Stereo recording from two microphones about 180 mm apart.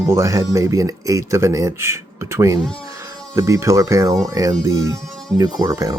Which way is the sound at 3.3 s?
15° right (ahead or behind).